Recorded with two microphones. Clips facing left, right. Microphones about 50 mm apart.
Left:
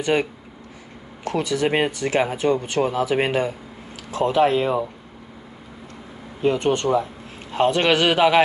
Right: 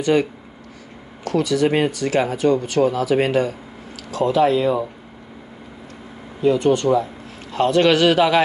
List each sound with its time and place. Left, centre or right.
0.0 s speech: left
6.4 s speech: left